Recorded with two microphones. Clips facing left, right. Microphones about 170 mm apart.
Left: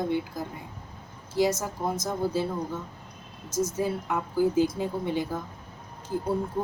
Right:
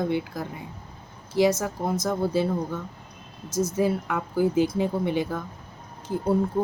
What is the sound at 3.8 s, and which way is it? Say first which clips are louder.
Speech: right 4 dB; 60° right (ahead or behind).